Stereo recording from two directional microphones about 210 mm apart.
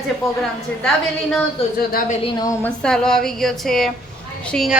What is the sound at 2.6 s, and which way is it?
A woman's voice, 5° left (ahead or behind).